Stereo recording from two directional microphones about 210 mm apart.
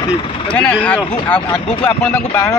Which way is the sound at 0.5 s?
5° left (ahead or behind).